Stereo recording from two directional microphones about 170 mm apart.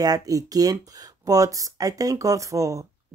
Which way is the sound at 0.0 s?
20° right (ahead or behind).